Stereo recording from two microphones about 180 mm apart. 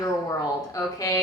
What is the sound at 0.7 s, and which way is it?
Speech, 20° left (ahead or behind).